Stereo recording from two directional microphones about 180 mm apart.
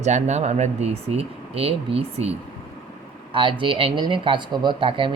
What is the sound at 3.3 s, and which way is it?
Speech, 25° right (ahead or behind).